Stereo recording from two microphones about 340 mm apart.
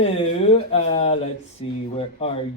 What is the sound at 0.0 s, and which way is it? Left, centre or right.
A man's voice, centre.